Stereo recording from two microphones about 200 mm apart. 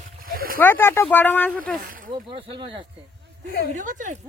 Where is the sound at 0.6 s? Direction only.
10° left (ahead or behind).